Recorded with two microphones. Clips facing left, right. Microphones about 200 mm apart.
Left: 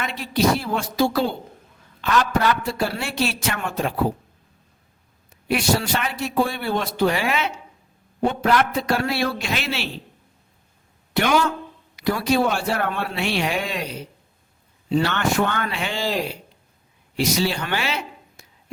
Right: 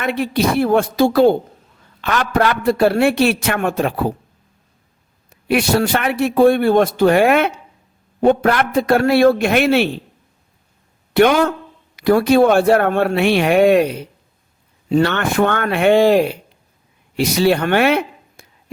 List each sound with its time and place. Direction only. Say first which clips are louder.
0.0 s a man's voice: right 4 dB; 60° right (ahead or behind)
5.5 s a man's voice: right 6 dB; 60° right (ahead or behind)
11.1 s a man's voice: right 7 dB; 55° right (ahead or behind)